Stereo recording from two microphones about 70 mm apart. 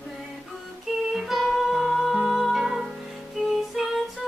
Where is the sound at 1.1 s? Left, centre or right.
Centre.